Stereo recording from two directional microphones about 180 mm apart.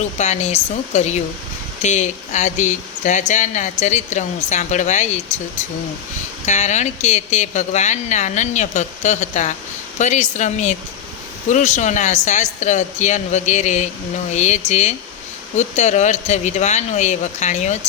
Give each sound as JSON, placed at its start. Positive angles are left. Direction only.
{"t": 0.2, "sound": "speech", "side_deg": 40}
{"t": 6.4, "sound": "speech", "side_deg": 40}